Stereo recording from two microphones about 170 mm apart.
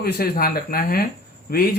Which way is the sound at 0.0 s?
60° left (ahead or behind).